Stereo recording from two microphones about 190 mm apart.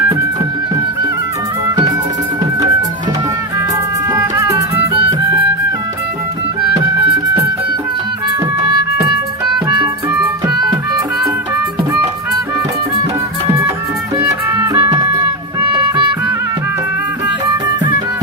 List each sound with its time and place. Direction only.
1.6 s music: 15° right (ahead or behind)
4.1 s music: 15° right (ahead or behind)
4.9 s music: 30° right (ahead or behind)
9.6 s music: 20° right (ahead or behind)
14.2 s music: 15° right (ahead or behind)